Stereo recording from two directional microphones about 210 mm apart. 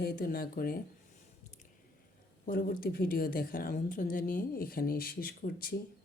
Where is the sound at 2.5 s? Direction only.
45° left (ahead or behind).